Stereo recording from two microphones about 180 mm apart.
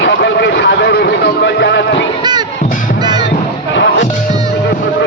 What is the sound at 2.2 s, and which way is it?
Music, 25° right (ahead or behind).